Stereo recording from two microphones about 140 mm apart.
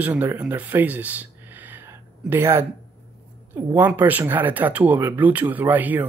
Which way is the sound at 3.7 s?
10° right (ahead or behind).